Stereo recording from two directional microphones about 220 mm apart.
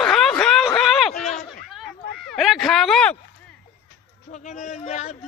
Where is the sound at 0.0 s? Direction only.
Centre (ahead or behind).